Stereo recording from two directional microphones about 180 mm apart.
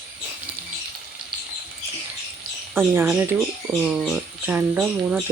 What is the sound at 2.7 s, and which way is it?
Speech, 15° right (ahead or behind).